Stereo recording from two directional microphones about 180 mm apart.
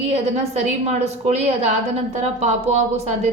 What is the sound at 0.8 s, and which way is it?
A woman's voice, 35° right (ahead or behind).